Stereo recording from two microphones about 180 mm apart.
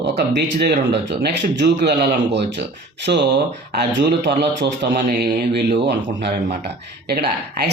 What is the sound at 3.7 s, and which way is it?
Speech, 65° right (ahead or behind).